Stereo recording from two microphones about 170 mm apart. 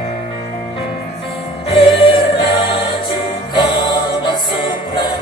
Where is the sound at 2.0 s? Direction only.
30° left (ahead or behind).